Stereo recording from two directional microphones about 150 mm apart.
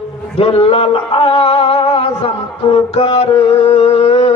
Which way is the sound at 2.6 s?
35° left (ahead or behind).